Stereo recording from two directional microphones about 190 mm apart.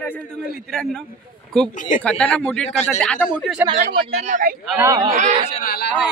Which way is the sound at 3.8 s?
40° right (ahead or behind).